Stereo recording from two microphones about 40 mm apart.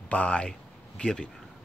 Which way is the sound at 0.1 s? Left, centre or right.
Left.